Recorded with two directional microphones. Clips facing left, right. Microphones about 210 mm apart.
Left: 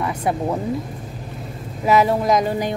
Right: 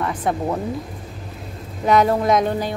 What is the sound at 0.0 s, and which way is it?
Speech, 10° left (ahead or behind).